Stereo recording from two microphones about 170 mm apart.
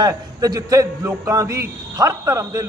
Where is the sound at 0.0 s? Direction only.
20° right (ahead or behind).